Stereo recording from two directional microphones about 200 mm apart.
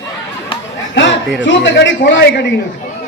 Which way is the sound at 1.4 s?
65° left (ahead or behind).